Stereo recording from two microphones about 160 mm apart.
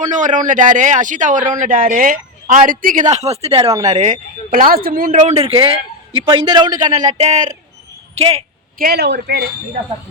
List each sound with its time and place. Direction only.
0.0 s a man's voice: 50° right (ahead or behind)
5.2 s speech: 40° right (ahead or behind)
6.1 s a man's voice: 30° right (ahead or behind)
7.1 s a man's voice: 45° right (ahead or behind)
8.8 s a man's voice: 85° right